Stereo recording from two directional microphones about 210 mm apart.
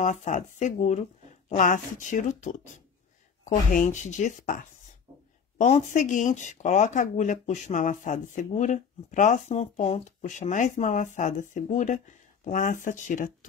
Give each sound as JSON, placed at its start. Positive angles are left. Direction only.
{"t": 0.0, "sound": "speech", "side_deg": 35}